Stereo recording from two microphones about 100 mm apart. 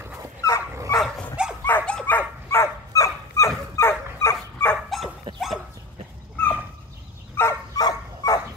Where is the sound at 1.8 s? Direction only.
10° left (ahead or behind); by 4.3 s 25° left (ahead or behind).